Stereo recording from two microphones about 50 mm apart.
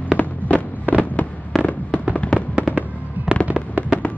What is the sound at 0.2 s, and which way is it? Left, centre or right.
Fireworks, left.